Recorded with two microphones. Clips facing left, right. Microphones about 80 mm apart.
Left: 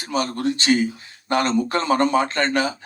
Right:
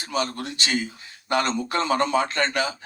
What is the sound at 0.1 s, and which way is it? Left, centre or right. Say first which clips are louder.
Speech: left 5 dB; left.